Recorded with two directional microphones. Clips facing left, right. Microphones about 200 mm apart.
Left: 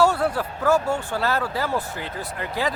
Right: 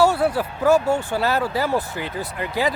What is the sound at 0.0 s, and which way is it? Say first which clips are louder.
Speech: right 2 dB; 5° right (ahead or behind).